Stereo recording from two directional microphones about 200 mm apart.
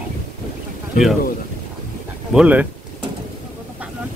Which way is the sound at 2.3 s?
5° right (ahead or behind).